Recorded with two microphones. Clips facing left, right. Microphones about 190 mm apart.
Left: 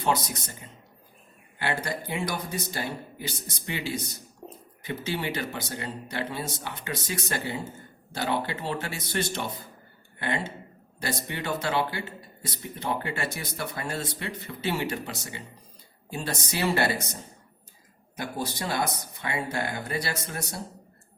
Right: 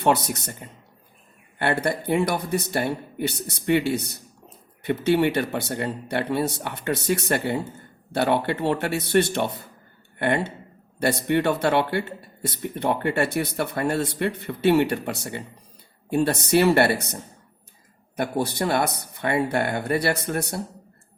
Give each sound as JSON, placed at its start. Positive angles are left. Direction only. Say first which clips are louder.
{"t": 0.0, "sound": "speech", "louder": "right 6 dB", "side_deg": -65}
{"t": 4.4, "sound": "a sound", "louder": "left 7 dB", "side_deg": 30}
{"t": 4.9, "sound": "speech", "louder": "right 11 dB", "side_deg": -60}
{"t": 18.2, "sound": "speech", "louder": "right 8 dB", "side_deg": -60}